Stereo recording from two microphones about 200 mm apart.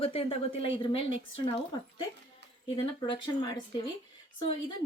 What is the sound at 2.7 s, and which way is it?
Speech, 25° left (ahead or behind).